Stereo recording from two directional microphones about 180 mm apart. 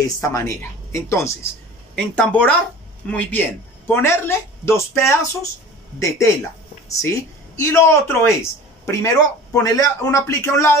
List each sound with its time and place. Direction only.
0.0 s speech: 15° left (ahead or behind)